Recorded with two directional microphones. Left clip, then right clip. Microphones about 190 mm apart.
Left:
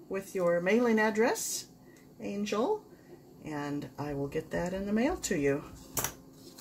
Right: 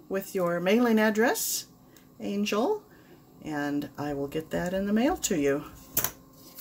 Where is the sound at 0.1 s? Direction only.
40° right (ahead or behind).